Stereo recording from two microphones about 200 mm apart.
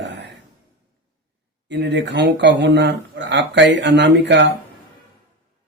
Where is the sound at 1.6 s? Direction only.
60° right (ahead or behind).